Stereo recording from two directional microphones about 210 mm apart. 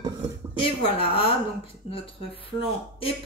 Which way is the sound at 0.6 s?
25° left (ahead or behind).